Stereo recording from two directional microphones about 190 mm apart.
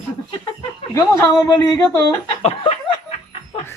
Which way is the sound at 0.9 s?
15° left (ahead or behind).